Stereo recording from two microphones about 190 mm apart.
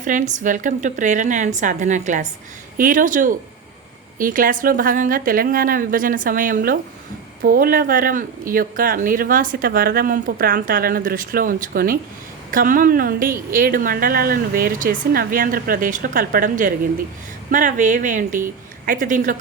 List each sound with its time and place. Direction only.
0.0 s a woman's voice: 40° right (ahead or behind)